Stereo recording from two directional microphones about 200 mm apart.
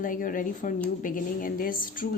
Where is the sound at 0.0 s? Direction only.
45° left (ahead or behind).